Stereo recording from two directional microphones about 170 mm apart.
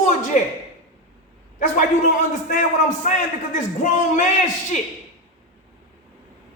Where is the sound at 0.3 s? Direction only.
50° left (ahead or behind).